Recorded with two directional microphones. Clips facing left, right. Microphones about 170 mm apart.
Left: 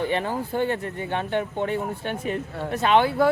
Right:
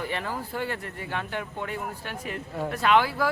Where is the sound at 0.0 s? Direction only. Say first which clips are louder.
Left 6 dB; 25° left (ahead or behind).